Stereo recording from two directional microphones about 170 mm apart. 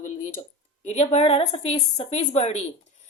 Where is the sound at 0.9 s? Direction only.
40° left (ahead or behind).